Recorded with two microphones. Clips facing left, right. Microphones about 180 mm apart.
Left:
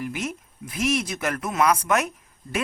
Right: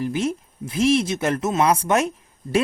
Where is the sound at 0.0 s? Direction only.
30° right (ahead or behind).